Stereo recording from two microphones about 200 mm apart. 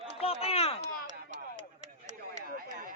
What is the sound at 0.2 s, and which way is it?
Speech, 30° left (ahead or behind).